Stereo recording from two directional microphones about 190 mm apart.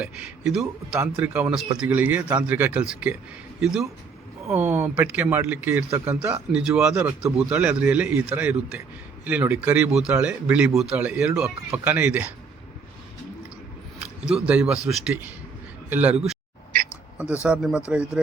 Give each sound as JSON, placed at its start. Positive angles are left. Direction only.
{"t": 0.0, "sound": "a man's voice", "side_deg": -5}
{"t": 14.0, "sound": "a man's voice", "side_deg": -5}
{"t": 17.4, "sound": "speech", "side_deg": -5}